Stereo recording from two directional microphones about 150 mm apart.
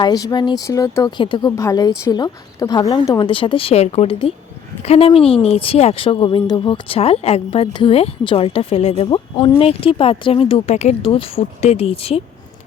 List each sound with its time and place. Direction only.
0.0 s speech: 25° left (ahead or behind)
1.5 s speech: 20° left (ahead or behind); by 12.2 s 40° left (ahead or behind)